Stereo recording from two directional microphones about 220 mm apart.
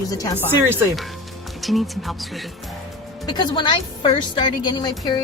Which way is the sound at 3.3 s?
20° left (ahead or behind).